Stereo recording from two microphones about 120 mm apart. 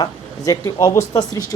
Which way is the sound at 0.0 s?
30° left (ahead or behind).